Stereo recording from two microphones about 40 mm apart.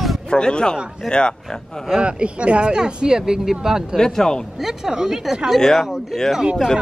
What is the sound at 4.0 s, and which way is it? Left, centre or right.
Speech, centre.